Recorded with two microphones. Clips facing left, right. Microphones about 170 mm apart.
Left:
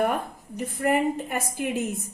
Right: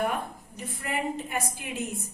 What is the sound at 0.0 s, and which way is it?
A woman's voice, 50° left (ahead or behind).